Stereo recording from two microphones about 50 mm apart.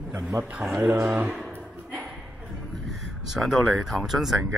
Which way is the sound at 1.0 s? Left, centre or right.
Right.